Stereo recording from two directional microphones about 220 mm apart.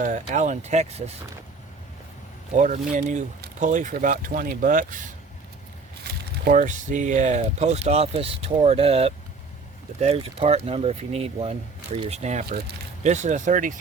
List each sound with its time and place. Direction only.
0.0 s speech: 35° right (ahead or behind)
2.6 s speech: 35° right (ahead or behind)
6.4 s speech: 35° right (ahead or behind)
12.5 s speech: 45° right (ahead or behind)
13.0 s speech: 30° right (ahead or behind)